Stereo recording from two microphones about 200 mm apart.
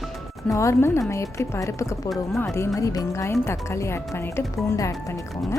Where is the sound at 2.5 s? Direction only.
15° left (ahead or behind).